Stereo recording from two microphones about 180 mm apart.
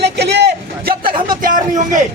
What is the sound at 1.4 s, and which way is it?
Speech, 45° right (ahead or behind).